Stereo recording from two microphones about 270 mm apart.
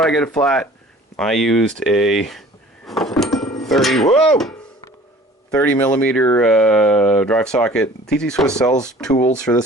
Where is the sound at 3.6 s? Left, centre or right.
Centre.